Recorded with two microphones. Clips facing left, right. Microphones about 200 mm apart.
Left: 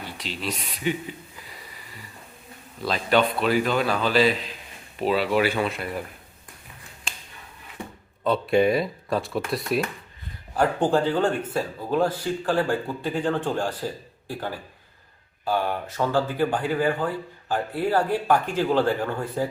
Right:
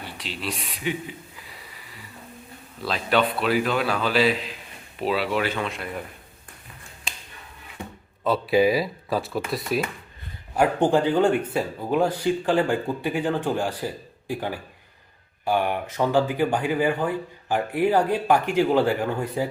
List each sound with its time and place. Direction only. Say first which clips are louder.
0.3 s a man's voice: left 1 dB; 5° right (ahead or behind)
2.8 s a man's voice: left 1 dB; 5° right (ahead or behind)
8.2 s a man's voice: even; 5° right (ahead or behind)
10.5 s speech: right 2 dB; 15° right (ahead or behind)